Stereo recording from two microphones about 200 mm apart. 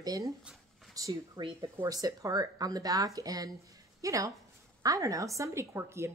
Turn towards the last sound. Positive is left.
turn(degrees=-15)  # may be behind; listen again after turning